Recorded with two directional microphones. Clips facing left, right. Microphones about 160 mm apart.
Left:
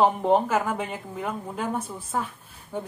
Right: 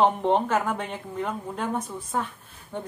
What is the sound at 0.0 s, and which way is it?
A woman's voice, 5° left (ahead or behind).